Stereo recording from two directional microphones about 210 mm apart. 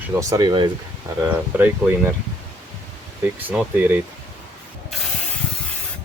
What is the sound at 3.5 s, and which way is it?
Speech, 10° right (ahead or behind).